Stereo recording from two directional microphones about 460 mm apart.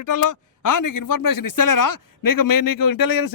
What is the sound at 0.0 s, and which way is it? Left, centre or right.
Speech, left.